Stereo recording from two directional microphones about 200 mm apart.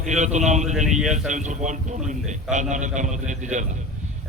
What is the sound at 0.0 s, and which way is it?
A man's voice, 35° right (ahead or behind).